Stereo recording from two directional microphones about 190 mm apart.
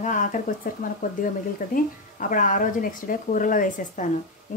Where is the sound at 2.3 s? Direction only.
45° left (ahead or behind).